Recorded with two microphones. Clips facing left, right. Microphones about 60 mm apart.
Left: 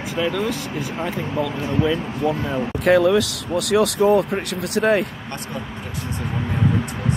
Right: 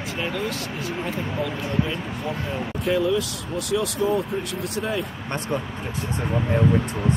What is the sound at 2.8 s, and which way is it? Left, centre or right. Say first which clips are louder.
Speech: left 7 dB; left.